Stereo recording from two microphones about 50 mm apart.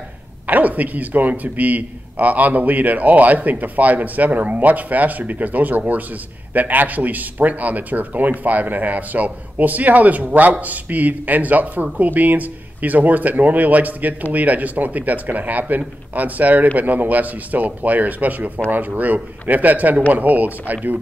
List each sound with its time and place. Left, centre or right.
0.5 s a man's voice: right